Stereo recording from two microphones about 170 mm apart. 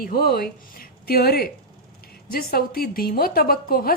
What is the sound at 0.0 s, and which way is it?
A woman's voice, 60° left (ahead or behind).